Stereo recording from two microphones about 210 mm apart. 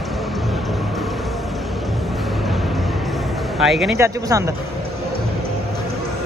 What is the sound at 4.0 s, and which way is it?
Speech, 15° right (ahead or behind).